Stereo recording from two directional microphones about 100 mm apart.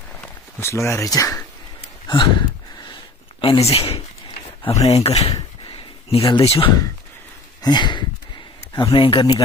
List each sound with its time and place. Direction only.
0.6 s speech: 30° left (ahead or behind)
2.0 s a sound: 50° left (ahead or behind)
3.4 s speech: 85° left
6.0 s speech: 75° left (ahead or behind)
7.6 s speech: 50° left (ahead or behind)